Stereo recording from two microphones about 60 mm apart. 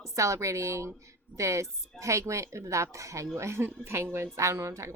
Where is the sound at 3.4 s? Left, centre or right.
Right.